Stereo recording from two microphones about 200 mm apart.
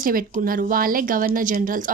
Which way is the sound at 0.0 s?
45° right (ahead or behind).